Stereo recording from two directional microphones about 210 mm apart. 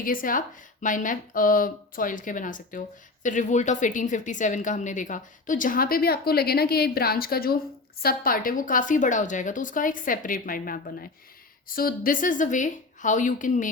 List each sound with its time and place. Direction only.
0.0 s a woman's voice: 40° left (ahead or behind)